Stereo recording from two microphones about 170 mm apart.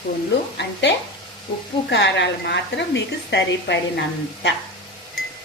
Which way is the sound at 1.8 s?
90° left.